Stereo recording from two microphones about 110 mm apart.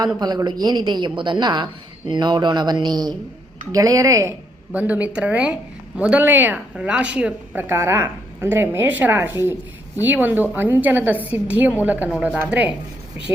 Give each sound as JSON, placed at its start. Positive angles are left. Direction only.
{"t": 0.2, "sound": "a woman's voice", "side_deg": -40}
{"t": 4.7, "sound": "a woman's voice", "side_deg": -15}
{"t": 7.7, "sound": "a woman's voice", "side_deg": -20}